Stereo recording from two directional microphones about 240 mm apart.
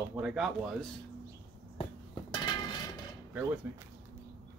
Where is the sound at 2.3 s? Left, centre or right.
Centre.